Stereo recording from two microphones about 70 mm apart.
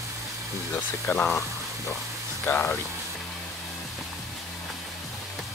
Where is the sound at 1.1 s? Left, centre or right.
Left.